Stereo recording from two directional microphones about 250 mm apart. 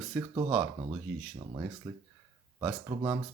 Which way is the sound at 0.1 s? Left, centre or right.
Centre.